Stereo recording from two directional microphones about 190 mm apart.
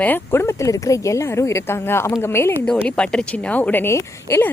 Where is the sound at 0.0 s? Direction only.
10° left (ahead or behind).